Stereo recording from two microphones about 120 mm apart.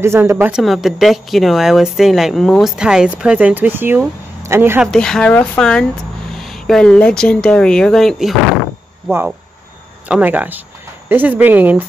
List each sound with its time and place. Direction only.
0.0 s speech: 20° right (ahead or behind)
0.6 s speech: centre (ahead or behind); by 4.8 s 20° right (ahead or behind)
4.9 s speech: 5° left (ahead or behind)
10.0 s speech: 10° right (ahead or behind)